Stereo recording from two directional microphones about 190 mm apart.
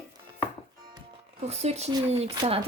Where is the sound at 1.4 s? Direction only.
35° right (ahead or behind).